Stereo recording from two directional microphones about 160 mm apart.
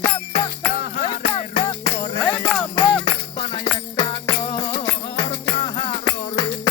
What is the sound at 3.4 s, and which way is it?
Music, 30° left (ahead or behind).